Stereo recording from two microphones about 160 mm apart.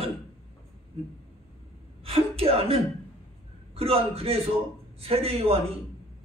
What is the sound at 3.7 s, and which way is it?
Speech, 35° right (ahead or behind).